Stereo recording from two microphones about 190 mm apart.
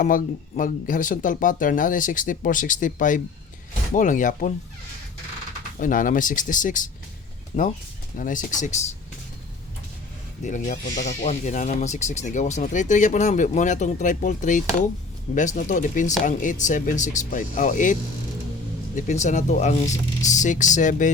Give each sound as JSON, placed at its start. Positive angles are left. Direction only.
{"t": 0.0, "sound": "speech", "side_deg": 45}
{"t": 5.8, "sound": "speech", "side_deg": 45}
{"t": 10.4, "sound": "speech", "side_deg": 40}
{"t": 18.9, "sound": "speech", "side_deg": 40}